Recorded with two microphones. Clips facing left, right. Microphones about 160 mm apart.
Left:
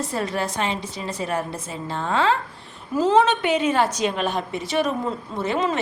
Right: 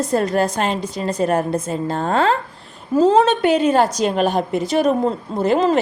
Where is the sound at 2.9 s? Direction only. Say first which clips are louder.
Right 4 dB; 30° right (ahead or behind).